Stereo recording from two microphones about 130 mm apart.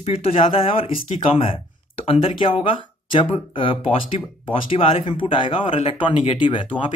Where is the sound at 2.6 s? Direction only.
40° left (ahead or behind).